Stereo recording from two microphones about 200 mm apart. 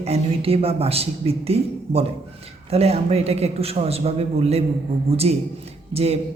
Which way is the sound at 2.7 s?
30° right (ahead or behind).